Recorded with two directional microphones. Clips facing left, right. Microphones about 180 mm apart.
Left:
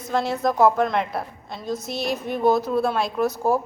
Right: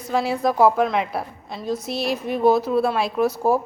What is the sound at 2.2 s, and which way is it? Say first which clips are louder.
Speech: right 2 dB; 5° right (ahead or behind).